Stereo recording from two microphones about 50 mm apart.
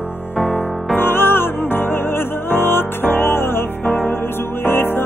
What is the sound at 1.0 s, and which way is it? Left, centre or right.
Music, left.